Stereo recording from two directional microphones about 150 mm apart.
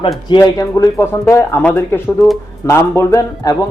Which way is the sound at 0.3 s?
25° left (ahead or behind).